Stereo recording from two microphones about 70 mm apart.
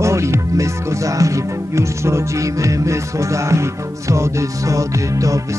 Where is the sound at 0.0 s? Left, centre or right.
Right.